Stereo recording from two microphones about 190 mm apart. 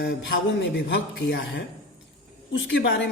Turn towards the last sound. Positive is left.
turn(degrees=75)  # may be behind; listen again after turning